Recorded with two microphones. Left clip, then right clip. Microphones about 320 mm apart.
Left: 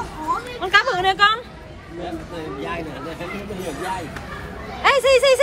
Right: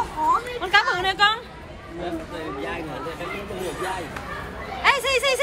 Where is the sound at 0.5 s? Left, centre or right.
Centre.